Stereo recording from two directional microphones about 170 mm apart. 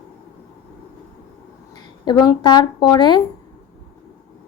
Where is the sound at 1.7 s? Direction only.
25° left (ahead or behind).